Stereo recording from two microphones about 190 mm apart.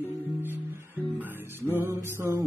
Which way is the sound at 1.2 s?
10° right (ahead or behind).